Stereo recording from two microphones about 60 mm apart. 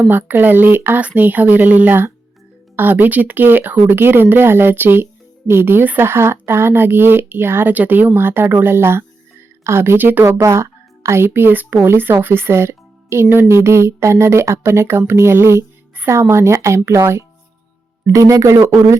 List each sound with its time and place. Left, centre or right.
0.1 s speech: right
10.4 s a child's voice: right
18.1 s speech: right